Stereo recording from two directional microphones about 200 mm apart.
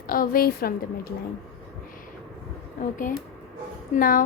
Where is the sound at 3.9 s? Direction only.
45° left (ahead or behind).